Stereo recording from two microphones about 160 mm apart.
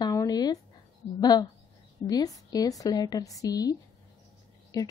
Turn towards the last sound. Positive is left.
turn(degrees=25)  # may be behind; listen again after turning